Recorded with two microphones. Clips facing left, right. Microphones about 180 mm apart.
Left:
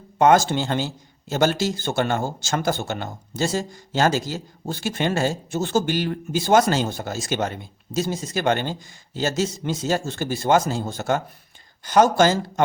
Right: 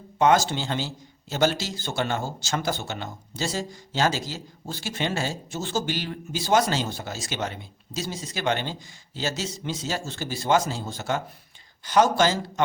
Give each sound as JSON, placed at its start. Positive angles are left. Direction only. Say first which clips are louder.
{"t": 0.2, "sound": "a man's voice", "louder": "left 4 dB", "side_deg": 50}